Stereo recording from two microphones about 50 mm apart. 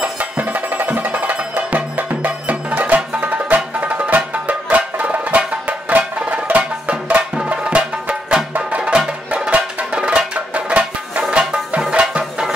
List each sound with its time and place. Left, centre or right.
0.2 s music: right